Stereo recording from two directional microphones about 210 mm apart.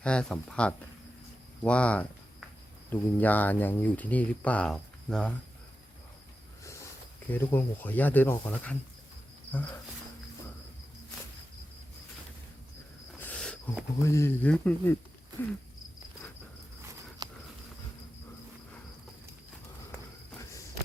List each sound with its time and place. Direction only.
0.0 s speech: 5° left (ahead or behind)
7.3 s speech: 10° left (ahead or behind)
13.1 s speech: 5° left (ahead or behind)
17.2 s a sound: 20° right (ahead or behind)